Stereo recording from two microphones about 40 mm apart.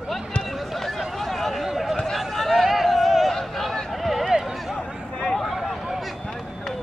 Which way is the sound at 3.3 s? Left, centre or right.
Centre.